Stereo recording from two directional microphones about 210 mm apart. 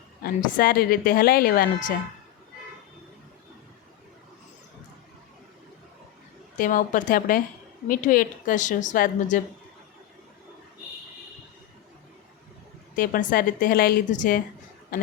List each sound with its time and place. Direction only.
0.2 s a woman's voice: 45° left (ahead or behind)
6.6 s a woman's voice: 40° left (ahead or behind)
13.0 s a woman's voice: 40° left (ahead or behind)